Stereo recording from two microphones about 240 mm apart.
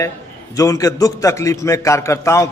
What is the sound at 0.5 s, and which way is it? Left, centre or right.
A man's voice, centre.